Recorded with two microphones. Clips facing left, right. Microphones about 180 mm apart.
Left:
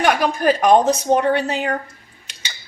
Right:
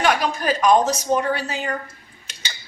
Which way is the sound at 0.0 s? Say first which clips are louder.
Left 4 dB; 55° left (ahead or behind).